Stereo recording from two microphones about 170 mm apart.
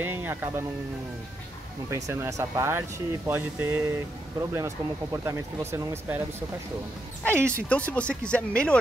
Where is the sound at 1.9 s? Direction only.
15° right (ahead or behind).